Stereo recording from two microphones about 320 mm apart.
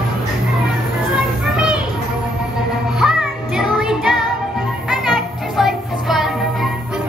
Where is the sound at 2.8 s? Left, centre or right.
Centre.